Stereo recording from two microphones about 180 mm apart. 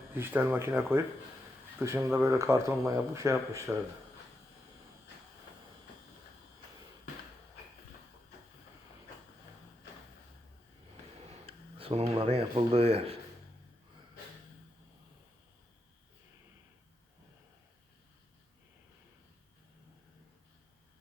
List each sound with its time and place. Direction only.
0.1 s speech: 10° right (ahead or behind)
11.4 s speech: 30° right (ahead or behind)